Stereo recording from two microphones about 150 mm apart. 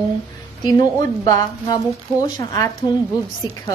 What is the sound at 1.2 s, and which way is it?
A woman's voice, 25° left (ahead or behind).